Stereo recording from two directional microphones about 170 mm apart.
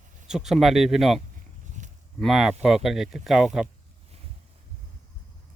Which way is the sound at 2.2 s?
Centre (ahead or behind).